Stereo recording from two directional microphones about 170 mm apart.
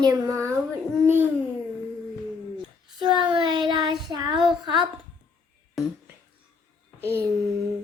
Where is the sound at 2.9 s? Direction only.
25° right (ahead or behind).